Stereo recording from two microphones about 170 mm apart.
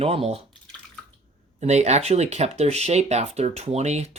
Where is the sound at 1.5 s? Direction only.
40° right (ahead or behind).